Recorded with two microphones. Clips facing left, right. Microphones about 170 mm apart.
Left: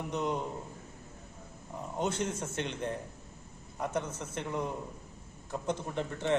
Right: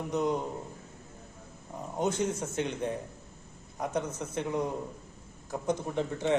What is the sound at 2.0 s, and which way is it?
Speech, 10° right (ahead or behind).